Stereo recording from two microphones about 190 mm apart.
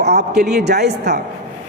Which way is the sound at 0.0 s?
60° right (ahead or behind).